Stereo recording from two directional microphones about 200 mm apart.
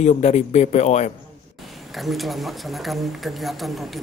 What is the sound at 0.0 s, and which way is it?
A man's voice, 35° left (ahead or behind).